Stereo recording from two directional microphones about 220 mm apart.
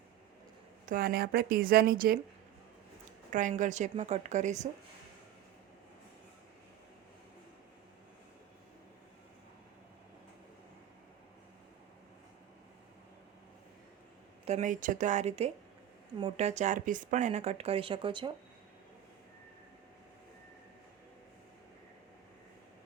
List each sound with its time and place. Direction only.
0.9 s speech: 40° right (ahead or behind)
3.3 s speech: 35° right (ahead or behind)
14.4 s speech: 30° right (ahead or behind)